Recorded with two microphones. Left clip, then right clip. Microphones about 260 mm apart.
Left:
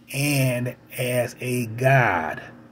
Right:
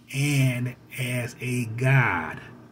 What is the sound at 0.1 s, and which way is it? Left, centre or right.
Speech, right.